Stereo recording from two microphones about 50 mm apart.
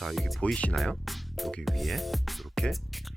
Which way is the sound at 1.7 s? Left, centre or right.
Centre.